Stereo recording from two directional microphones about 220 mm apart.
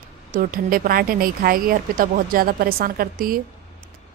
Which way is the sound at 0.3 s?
40° right (ahead or behind).